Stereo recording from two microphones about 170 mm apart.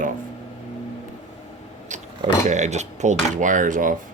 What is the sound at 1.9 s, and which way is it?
Speech, 45° right (ahead or behind).